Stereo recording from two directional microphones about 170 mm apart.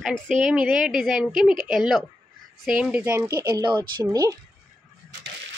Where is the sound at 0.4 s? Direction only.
Centre (ahead or behind).